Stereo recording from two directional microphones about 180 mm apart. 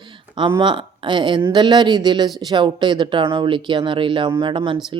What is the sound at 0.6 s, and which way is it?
Speech, 25° right (ahead or behind).